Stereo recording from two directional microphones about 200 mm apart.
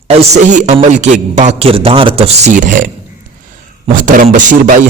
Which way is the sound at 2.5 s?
40° right (ahead or behind).